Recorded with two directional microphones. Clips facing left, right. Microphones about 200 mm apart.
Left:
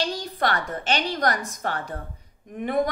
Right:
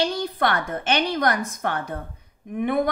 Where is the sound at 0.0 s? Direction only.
55° right (ahead or behind).